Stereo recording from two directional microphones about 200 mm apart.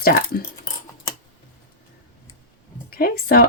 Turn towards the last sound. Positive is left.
turn(degrees=50)  # may be behind; listen again after turning